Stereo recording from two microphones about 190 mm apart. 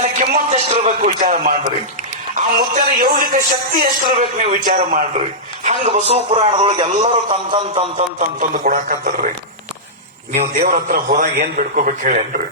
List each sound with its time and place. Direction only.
0.2 s a man's voice: 40° right (ahead or behind)
7.3 s a sound: 25° right (ahead or behind)
8.2 s a man's voice: 45° right (ahead or behind)
10.3 s a man's voice: 45° right (ahead or behind)